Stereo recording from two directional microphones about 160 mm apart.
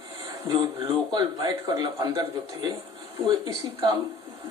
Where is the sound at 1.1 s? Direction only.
25° right (ahead or behind).